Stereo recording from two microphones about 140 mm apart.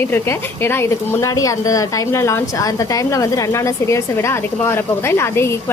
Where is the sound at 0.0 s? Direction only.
15° left (ahead or behind).